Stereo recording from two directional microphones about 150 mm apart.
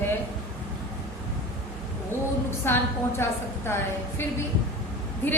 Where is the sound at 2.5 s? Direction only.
15° left (ahead or behind).